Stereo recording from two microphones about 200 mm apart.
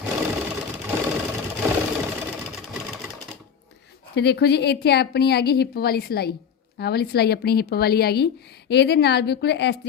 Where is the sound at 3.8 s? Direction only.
55° left (ahead or behind).